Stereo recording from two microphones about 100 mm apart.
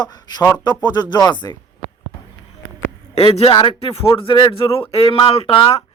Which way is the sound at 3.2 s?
75° left (ahead or behind).